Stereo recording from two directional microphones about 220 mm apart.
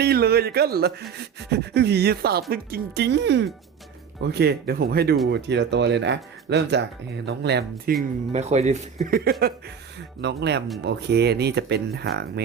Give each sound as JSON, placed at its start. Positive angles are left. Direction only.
{"t": 0.0, "sound": "speech", "side_deg": -45}
{"t": 8.3, "sound": "speech", "side_deg": -30}